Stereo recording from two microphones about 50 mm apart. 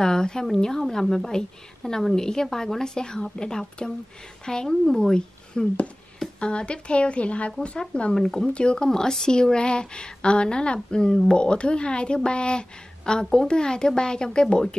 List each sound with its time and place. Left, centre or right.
0.0 s a woman's voice: centre
8.1 s a woman's voice: centre